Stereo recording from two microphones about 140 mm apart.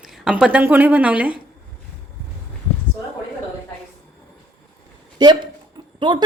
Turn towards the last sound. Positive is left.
turn(degrees=-35)  # may be behind; listen again after turning